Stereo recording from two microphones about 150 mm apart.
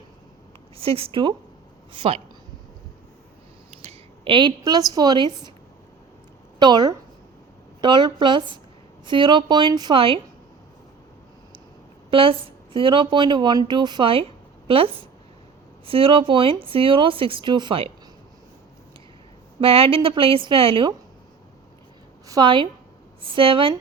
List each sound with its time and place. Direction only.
0.8 s a woman's voice: 40° right (ahead or behind)
3.7 s a sound: 45° right (ahead or behind)
4.9 s a woman's voice: 25° right (ahead or behind)
6.6 s a woman's voice: 30° right (ahead or behind)
12.1 s a woman's voice: 35° right (ahead or behind)
19.5 s a woman's voice: 40° right (ahead or behind)
22.3 s a woman's voice: 30° right (ahead or behind)